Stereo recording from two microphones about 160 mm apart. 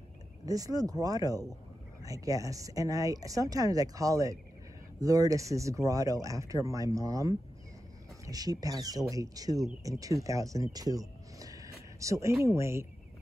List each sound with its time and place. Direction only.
0.5 s speech: 20° right (ahead or behind)